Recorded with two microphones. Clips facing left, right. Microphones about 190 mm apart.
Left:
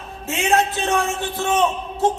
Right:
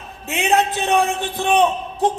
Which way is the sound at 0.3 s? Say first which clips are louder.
Right 1 dB; 20° right (ahead or behind).